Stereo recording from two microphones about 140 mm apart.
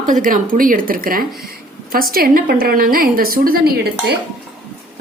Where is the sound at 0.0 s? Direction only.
75° right (ahead or behind); by 3.9 s 90° right.